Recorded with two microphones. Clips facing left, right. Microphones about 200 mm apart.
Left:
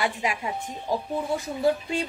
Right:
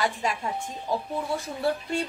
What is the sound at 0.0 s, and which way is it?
A woman's voice, 15° left (ahead or behind).